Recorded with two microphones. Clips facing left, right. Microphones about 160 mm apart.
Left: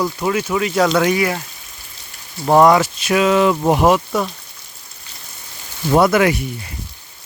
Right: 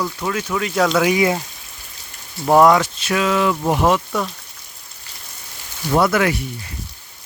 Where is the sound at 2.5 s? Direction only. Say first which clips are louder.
Left 1 dB; centre (ahead or behind).